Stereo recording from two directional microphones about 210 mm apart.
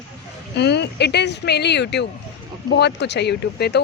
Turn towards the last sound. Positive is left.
turn(degrees=50)  # may be behind; listen again after turning